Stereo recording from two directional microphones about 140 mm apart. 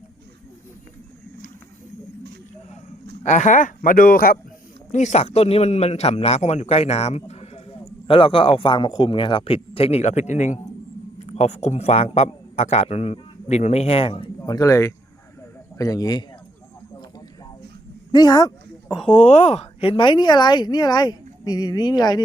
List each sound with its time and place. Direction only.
3.2 s speech: 60° left (ahead or behind); by 4.4 s 90° left
4.9 s a man's voice: 60° left (ahead or behind); by 16.2 s 25° left (ahead or behind)
18.1 s speech: 30° left (ahead or behind)
19.0 s a woman's voice: 45° left (ahead or behind)